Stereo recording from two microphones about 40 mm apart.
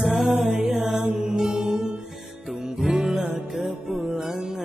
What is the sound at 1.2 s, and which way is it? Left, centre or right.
Mantra, centre.